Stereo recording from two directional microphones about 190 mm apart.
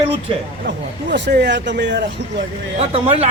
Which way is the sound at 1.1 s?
65° right (ahead or behind).